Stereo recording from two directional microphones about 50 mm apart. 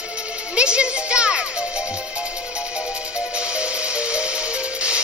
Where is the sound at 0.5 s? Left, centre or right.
Right.